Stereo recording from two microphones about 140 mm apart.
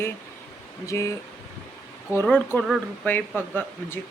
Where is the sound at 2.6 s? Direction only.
Centre (ahead or behind).